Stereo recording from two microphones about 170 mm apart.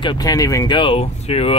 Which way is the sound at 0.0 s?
25° left (ahead or behind).